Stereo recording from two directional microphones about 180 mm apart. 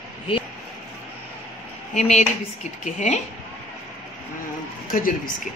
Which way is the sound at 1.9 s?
40° left (ahead or behind).